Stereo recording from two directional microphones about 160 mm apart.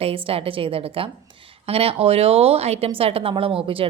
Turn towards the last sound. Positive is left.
turn(degrees=-35)  # may be behind; listen again after turning